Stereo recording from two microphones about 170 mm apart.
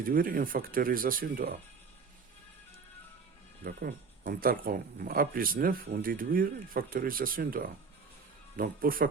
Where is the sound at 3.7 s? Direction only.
60° right (ahead or behind).